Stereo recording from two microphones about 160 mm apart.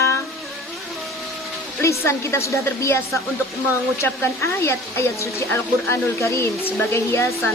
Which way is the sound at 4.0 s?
15° left (ahead or behind).